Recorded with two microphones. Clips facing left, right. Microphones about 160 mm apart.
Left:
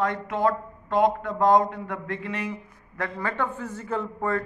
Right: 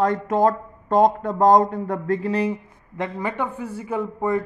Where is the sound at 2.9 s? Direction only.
20° right (ahead or behind).